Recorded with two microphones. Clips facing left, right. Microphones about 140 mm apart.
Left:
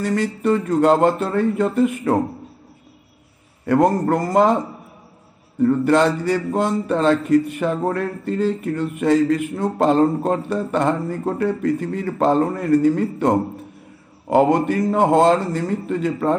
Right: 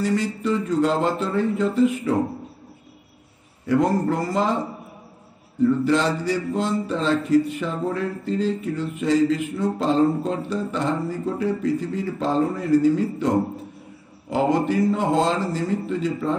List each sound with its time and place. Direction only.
0.0 s speech: 55° left (ahead or behind)
3.6 s a man's voice: 55° left (ahead or behind)
5.6 s speech: 55° left (ahead or behind)
14.3 s speech: 55° left (ahead or behind)